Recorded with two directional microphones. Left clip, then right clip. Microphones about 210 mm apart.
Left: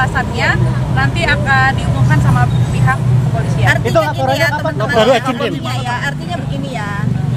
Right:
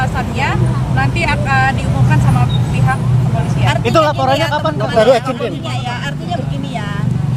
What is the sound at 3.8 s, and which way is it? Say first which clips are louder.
Speech: right 2 dB; 55° right (ahead or behind).